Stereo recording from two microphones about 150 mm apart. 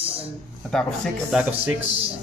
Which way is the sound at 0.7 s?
5° left (ahead or behind).